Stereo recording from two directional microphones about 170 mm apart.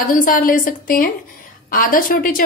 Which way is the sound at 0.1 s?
55° left (ahead or behind).